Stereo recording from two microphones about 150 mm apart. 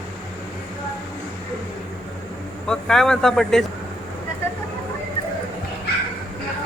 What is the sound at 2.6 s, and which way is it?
Speech, 5° left (ahead or behind).